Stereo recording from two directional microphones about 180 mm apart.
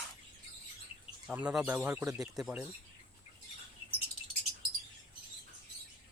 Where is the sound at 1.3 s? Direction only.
5° right (ahead or behind).